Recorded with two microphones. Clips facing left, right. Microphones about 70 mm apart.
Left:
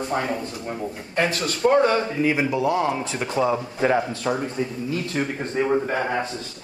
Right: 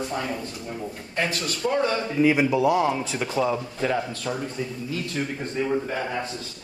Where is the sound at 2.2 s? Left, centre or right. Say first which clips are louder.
Right 2 dB; centre.